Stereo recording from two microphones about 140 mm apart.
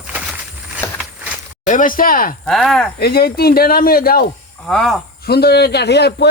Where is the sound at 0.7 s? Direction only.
10° right (ahead or behind).